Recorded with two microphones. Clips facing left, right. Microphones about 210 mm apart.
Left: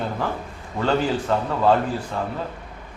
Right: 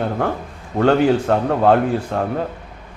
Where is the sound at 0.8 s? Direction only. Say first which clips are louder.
Right 7 dB; 60° right (ahead or behind).